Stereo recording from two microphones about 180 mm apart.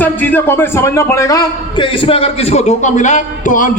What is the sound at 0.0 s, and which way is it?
A man's voice, 10° left (ahead or behind).